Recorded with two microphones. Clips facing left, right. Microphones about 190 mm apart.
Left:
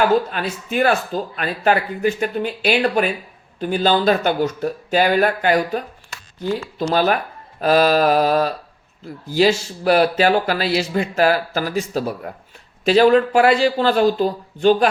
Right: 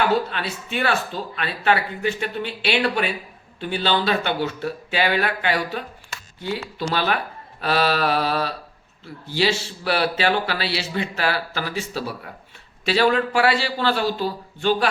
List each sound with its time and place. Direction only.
0.3 s speech: 45° left (ahead or behind)
6.9 s speech: 45° left (ahead or behind)